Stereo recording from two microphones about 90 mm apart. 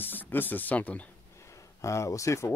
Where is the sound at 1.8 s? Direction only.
35° left (ahead or behind).